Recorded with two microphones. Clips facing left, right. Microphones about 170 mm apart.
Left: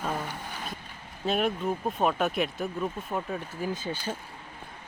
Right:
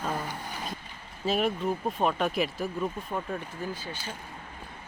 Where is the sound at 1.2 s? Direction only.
Centre (ahead or behind).